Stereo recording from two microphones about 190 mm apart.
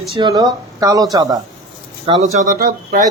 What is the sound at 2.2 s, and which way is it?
Speech, 40° right (ahead or behind).